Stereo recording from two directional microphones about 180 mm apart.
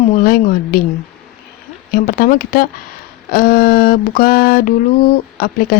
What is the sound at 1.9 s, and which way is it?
Speech, 50° left (ahead or behind).